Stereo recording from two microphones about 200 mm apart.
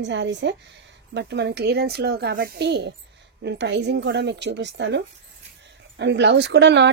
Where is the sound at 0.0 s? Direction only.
65° right (ahead or behind).